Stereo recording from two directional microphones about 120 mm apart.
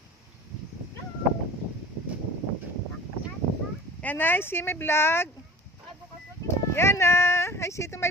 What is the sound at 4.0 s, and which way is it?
Speech, 15° left (ahead or behind).